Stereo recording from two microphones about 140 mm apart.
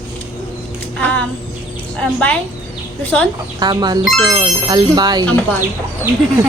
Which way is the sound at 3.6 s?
30° right (ahead or behind).